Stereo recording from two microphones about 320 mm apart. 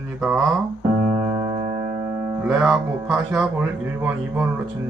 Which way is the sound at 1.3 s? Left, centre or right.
Centre.